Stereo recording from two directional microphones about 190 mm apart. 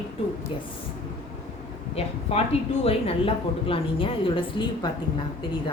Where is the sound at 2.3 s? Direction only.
30° left (ahead or behind).